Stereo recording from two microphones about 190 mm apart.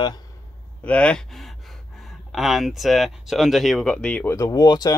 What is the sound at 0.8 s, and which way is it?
Speech, 5° left (ahead or behind).